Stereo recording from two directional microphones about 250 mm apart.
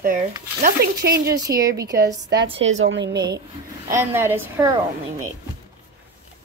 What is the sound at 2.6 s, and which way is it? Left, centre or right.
Speech, right.